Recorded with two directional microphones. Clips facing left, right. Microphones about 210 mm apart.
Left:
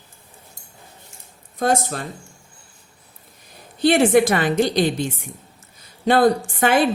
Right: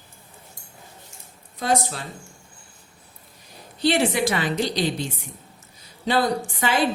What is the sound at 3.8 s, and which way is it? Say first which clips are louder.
A woman's voice: left 6 dB; 50° left (ahead or behind).